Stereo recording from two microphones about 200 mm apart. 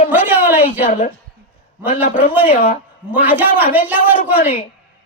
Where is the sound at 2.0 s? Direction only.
40° left (ahead or behind).